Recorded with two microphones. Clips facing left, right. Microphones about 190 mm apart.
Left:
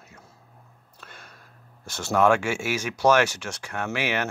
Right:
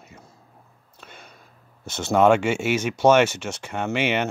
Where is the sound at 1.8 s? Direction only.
20° right (ahead or behind).